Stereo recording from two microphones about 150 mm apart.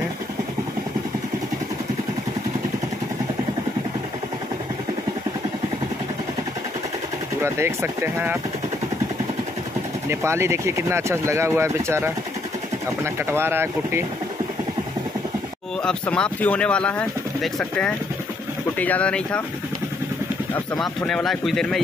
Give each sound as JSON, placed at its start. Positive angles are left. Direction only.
{"t": 7.4, "sound": "speech", "side_deg": -20}
{"t": 10.0, "sound": "speech", "side_deg": -15}
{"t": 15.8, "sound": "speech", "side_deg": 5}
{"t": 20.5, "sound": "speech", "side_deg": 10}